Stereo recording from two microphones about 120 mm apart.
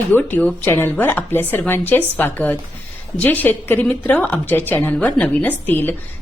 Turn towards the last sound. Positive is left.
turn(degrees=15)  # may be behind; listen again after turning